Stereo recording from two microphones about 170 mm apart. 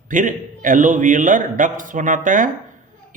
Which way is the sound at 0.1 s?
50° right (ahead or behind).